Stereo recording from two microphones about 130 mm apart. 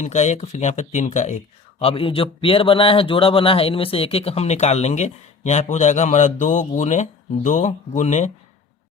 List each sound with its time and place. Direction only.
0.0 s speech: 60° left (ahead or behind)
1.8 s speech: 45° left (ahead or behind); by 8.3 s 65° left (ahead or behind)